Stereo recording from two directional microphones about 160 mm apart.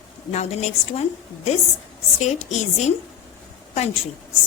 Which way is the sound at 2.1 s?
45° left (ahead or behind).